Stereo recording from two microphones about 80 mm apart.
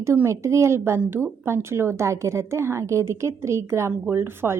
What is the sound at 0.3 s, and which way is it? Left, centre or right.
A woman's voice, right.